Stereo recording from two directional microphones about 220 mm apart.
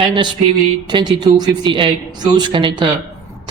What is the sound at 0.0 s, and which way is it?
A man's voice, 20° right (ahead or behind).